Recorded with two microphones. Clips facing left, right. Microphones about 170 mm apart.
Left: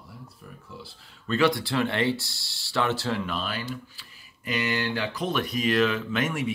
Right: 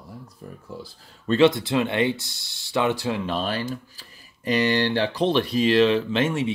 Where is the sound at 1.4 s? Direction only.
20° right (ahead or behind).